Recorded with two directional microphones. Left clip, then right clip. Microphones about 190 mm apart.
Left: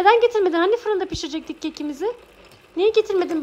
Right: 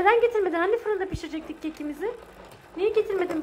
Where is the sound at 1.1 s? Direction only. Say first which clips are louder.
Left 6 dB; 30° left (ahead or behind).